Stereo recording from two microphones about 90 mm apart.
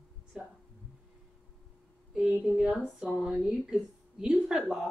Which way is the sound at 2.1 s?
15° right (ahead or behind).